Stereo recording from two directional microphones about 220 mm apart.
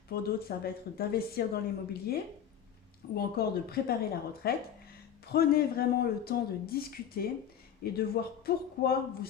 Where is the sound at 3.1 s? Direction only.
45° left (ahead or behind).